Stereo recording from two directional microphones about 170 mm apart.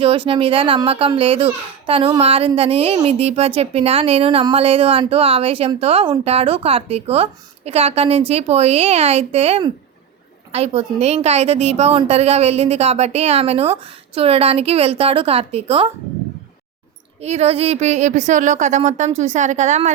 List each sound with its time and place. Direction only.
0.0 s speech: 30° right (ahead or behind)
17.2 s speech: 40° right (ahead or behind)